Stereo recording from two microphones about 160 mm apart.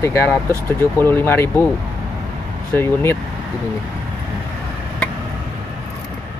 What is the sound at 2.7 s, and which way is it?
Speech, 15° left (ahead or behind).